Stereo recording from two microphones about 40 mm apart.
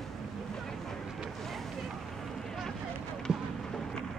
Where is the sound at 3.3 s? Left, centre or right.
Centre.